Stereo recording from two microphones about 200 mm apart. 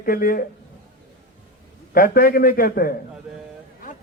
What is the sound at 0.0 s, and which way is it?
Speech, 45° left (ahead or behind).